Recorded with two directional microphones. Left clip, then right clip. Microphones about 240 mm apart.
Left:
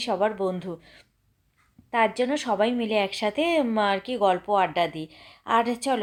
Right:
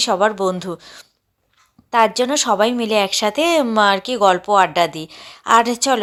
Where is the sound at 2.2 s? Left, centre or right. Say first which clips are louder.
Right 8 dB; centre.